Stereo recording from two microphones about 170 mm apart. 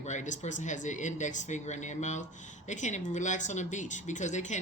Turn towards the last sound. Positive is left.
turn(degrees=45)  # may be behind; listen again after turning